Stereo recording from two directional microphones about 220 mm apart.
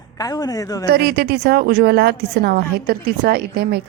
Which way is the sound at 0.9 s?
45° right (ahead or behind).